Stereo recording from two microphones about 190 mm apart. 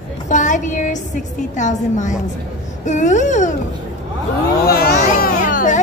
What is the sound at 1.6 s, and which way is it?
A woman's voice, 40° left (ahead or behind).